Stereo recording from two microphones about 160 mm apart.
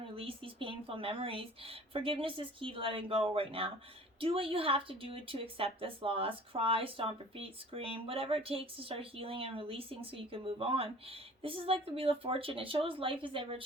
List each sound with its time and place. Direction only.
0.2 s a woman's voice: 35° right (ahead or behind)